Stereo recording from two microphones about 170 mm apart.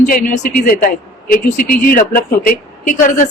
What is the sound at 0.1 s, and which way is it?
A man's voice, 50° left (ahead or behind).